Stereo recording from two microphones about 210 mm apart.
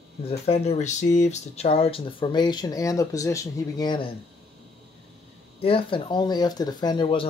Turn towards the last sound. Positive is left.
turn(degrees=20)  # may be behind; listen again after turning